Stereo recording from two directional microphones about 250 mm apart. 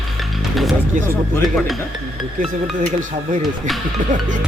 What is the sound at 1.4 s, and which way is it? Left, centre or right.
Speech, centre.